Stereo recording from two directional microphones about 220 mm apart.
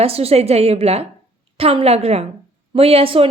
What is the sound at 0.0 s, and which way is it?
A woman's voice, 25° right (ahead or behind).